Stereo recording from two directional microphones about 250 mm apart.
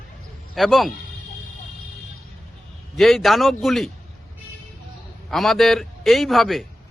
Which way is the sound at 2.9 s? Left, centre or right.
Centre.